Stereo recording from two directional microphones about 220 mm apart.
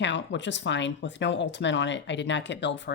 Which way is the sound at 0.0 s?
55° left (ahead or behind).